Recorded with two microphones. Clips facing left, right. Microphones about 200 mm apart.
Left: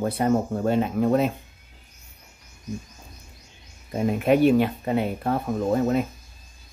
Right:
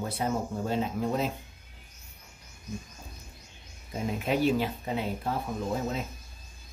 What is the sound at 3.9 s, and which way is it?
Speech, 60° left (ahead or behind).